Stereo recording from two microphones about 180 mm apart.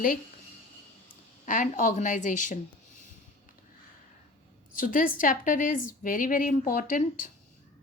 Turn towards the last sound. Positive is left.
turn(degrees=50)  # may be behind; listen again after turning